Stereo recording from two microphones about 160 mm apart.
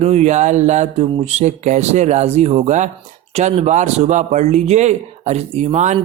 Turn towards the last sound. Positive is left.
turn(degrees=-45)  # may be behind; listen again after turning